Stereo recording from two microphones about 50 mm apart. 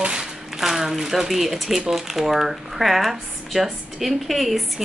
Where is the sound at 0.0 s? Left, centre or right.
Centre.